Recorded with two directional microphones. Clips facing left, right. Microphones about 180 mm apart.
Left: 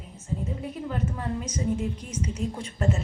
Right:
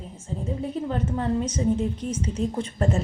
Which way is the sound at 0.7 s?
30° right (ahead or behind).